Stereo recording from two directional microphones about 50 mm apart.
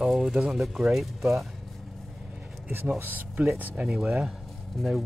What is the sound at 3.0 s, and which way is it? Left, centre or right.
Speech, right.